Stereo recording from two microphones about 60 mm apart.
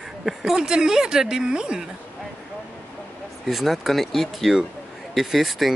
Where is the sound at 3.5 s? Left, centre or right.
Centre.